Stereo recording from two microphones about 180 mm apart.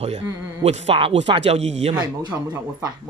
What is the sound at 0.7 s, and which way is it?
Speech, 35° right (ahead or behind).